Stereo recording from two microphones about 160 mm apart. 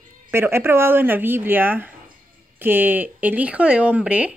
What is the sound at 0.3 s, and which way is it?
Speech, 15° right (ahead or behind).